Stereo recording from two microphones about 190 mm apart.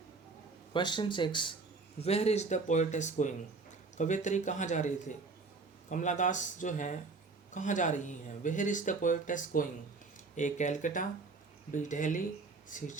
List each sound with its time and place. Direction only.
0.7 s speech: 25° left (ahead or behind); by 13.0 s 40° left (ahead or behind)